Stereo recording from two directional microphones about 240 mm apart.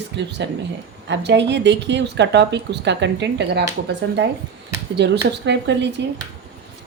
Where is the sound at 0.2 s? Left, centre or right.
Right.